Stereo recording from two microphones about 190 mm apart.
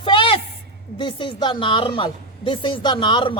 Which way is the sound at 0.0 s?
25° left (ahead or behind).